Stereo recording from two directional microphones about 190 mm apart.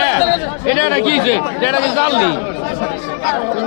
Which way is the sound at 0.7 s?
25° left (ahead or behind).